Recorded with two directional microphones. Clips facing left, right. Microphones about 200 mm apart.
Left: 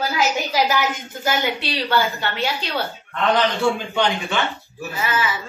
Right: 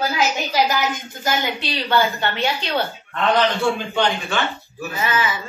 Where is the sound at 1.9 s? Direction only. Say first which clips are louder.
Right 3 dB; 5° left (ahead or behind).